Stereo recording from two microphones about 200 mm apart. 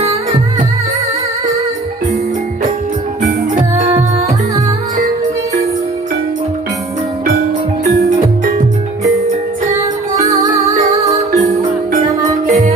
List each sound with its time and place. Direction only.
0.0 s music: 30° right (ahead or behind)
8.0 s music: 50° right (ahead or behind)
11.3 s music: 35° right (ahead or behind)